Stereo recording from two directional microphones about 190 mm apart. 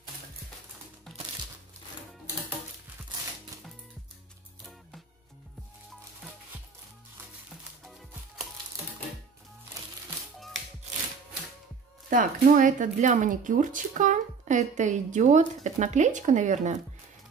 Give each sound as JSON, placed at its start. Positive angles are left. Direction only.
{"t": 1.1, "sound": "crumpling", "side_deg": 0}
{"t": 12.1, "sound": "speech", "side_deg": -45}